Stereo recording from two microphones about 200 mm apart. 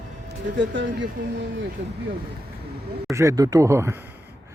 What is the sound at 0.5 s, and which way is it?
Speech, 65° right (ahead or behind).